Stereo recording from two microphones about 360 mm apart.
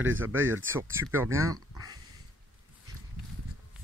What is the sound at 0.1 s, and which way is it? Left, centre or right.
Speech, right.